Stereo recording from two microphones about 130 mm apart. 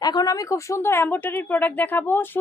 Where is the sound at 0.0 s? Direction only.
30° left (ahead or behind).